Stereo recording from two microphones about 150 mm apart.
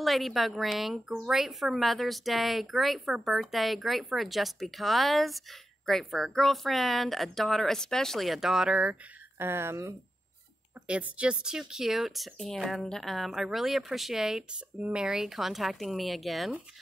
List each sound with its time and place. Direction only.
0.0 s a woman's voice: centre (ahead or behind)
9.4 s a woman's voice: 15° right (ahead or behind); by 16.5 s centre (ahead or behind)